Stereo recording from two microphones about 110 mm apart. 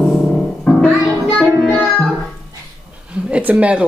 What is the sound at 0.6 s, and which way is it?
Music, 10° left (ahead or behind).